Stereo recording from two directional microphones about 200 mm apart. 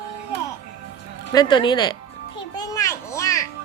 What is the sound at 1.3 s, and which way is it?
Speech, 20° left (ahead or behind).